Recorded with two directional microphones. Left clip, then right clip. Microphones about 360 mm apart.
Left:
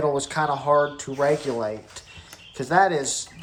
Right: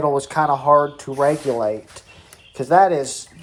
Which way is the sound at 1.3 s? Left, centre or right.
Right.